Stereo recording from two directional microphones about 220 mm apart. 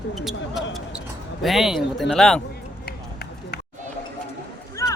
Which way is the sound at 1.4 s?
Centre (ahead or behind).